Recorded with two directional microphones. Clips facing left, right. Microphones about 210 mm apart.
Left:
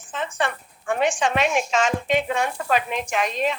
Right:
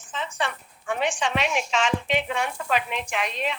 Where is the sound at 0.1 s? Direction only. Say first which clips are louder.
Left 4 dB; 50° left (ahead or behind).